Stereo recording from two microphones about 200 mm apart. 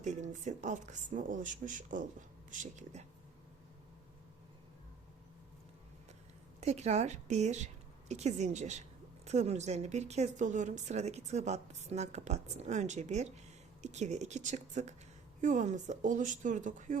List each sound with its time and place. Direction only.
0.0 s speech: 35° right (ahead or behind)
6.6 s a woman's voice: 35° right (ahead or behind)